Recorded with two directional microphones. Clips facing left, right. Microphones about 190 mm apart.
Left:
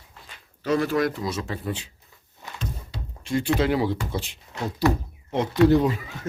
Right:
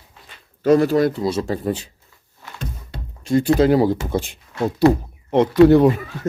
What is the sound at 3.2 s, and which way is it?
Speech, 40° right (ahead or behind).